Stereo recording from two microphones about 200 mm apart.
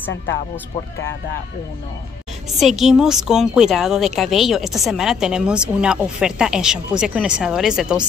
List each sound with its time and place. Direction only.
2.6 s a woman's voice: centre (ahead or behind)